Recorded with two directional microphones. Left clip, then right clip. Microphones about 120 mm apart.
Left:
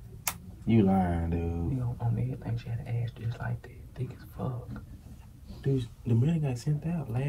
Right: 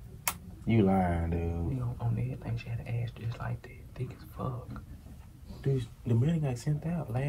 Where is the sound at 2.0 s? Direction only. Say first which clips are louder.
Left 2 dB; 5° left (ahead or behind).